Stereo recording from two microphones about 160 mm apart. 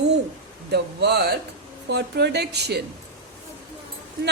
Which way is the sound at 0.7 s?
90° right.